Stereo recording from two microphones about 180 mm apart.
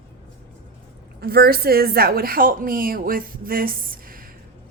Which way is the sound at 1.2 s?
60° right (ahead or behind).